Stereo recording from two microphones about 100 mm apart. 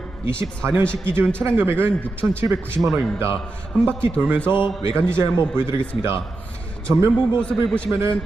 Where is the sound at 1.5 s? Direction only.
25° right (ahead or behind).